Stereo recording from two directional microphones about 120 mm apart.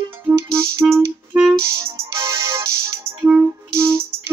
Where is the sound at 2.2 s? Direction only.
25° right (ahead or behind).